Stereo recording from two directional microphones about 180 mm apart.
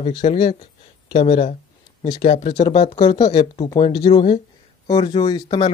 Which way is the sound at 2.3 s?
40° left (ahead or behind).